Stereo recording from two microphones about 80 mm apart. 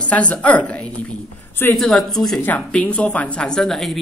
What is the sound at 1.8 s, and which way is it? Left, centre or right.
Speech, centre.